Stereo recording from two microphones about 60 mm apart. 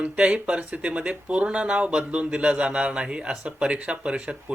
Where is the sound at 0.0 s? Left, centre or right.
Centre.